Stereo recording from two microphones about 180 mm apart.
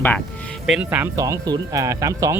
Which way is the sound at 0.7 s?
10° right (ahead or behind).